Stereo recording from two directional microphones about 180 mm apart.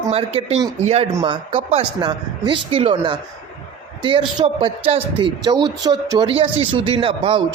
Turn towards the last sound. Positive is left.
turn(degrees=-30)  # may be behind; listen again after turning